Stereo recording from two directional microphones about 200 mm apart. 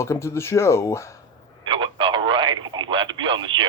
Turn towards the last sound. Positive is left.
turn(degrees=-25)  # may be behind; listen again after turning